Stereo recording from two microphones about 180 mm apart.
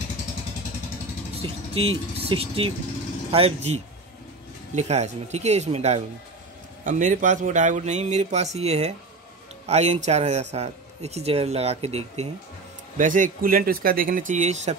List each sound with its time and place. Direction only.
1.4 s speech: 30° right (ahead or behind)
12.9 s speech: 45° right (ahead or behind)